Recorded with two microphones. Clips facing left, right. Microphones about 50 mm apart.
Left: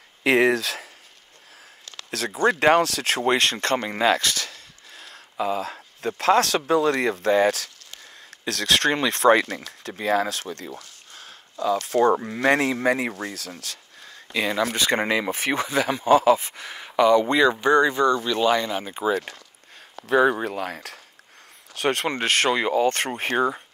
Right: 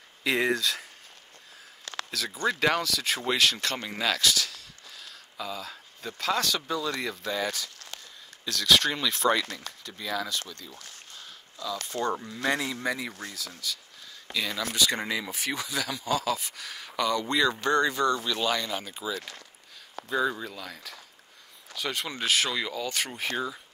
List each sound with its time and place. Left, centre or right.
0.2 s speech: left
2.0 s speech: left
3.3 s speech: left
11.1 s a sound: left
11.9 s speech: left
12.3 s speech: left
14.0 s speech: left
20.1 s speech: left
22.5 s speech: left